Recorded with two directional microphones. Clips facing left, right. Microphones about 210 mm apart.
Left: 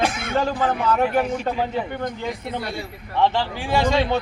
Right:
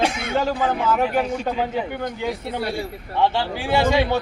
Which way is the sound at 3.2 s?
10° right (ahead or behind).